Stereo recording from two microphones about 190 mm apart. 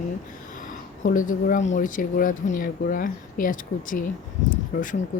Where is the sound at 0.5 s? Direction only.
45° left (ahead or behind).